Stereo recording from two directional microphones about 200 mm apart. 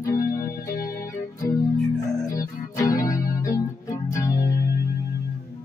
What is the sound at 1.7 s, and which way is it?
Music, centre (ahead or behind).